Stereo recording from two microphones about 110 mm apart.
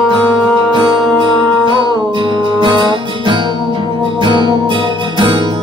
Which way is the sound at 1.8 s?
45° right (ahead or behind).